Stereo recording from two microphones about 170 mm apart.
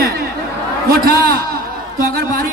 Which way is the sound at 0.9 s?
65° right (ahead or behind).